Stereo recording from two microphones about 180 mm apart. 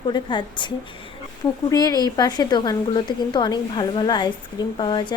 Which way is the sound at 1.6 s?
20° left (ahead or behind).